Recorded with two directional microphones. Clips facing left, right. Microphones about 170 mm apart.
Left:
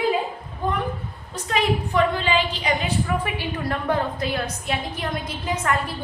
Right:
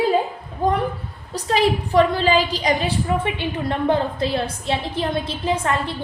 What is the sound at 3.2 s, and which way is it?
A woman's voice, 25° right (ahead or behind).